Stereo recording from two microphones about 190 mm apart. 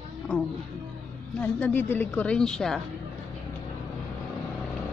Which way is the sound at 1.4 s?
10° left (ahead or behind).